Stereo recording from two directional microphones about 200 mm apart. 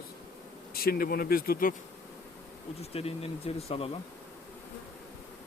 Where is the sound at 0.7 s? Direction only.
50° left (ahead or behind).